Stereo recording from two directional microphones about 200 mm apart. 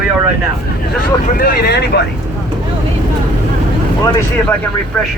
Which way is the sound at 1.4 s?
55° left (ahead or behind).